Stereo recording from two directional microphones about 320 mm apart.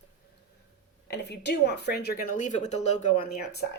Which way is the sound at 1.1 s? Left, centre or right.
Left.